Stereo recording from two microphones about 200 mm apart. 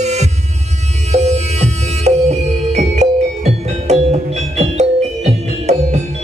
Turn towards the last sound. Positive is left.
turn(degrees=-35)  # may be behind; listen again after turning